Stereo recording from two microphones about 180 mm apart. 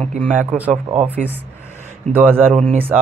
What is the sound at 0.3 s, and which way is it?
Speech, 10° right (ahead or behind).